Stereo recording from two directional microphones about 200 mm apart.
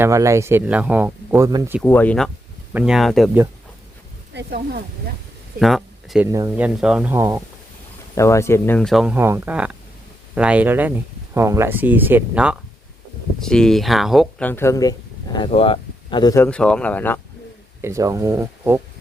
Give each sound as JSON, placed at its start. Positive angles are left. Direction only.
{"t": 0.0, "sound": "speech", "side_deg": -15}
{"t": 1.8, "sound": "speech", "side_deg": 10}
{"t": 4.4, "sound": "speech", "side_deg": -50}
{"t": 5.5, "sound": "speech", "side_deg": 0}
{"t": 6.2, "sound": "speech", "side_deg": -15}
{"t": 6.7, "sound": "speech", "side_deg": -5}
{"t": 8.1, "sound": "speech", "side_deg": 15}
{"t": 17.8, "sound": "speech", "side_deg": -15}